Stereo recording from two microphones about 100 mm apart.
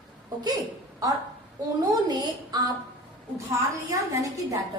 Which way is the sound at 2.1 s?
40° right (ahead or behind).